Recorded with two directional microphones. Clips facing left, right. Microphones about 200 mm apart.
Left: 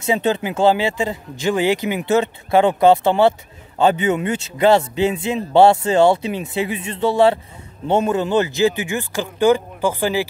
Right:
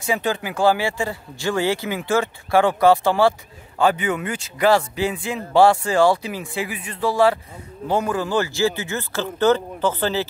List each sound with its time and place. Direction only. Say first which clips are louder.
0.0 s speech: left 4 dB; 25° left (ahead or behind)